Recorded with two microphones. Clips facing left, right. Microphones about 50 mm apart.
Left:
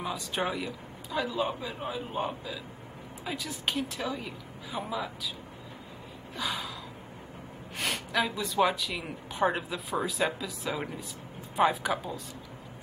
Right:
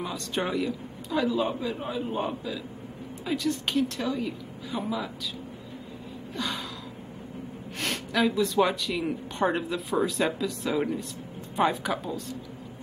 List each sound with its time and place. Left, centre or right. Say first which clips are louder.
0.0 s speech: right 1 dB; centre
6.3 s gasp: right 1 dB; centre
7.8 s speech: right 3 dB; centre